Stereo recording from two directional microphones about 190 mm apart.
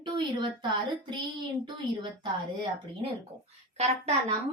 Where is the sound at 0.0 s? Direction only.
25° right (ahead or behind).